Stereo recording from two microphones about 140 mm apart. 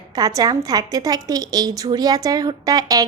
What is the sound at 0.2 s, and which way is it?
A woman's voice, 25° right (ahead or behind).